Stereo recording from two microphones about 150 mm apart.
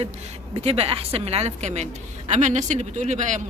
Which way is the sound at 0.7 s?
40° right (ahead or behind).